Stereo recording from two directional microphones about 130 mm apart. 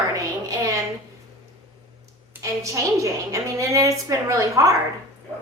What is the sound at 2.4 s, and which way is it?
A woman's voice, 25° right (ahead or behind).